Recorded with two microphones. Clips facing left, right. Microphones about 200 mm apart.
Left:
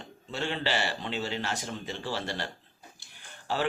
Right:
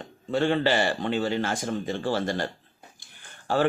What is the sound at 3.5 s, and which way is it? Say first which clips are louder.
Speech: right 6 dB; 50° right (ahead or behind).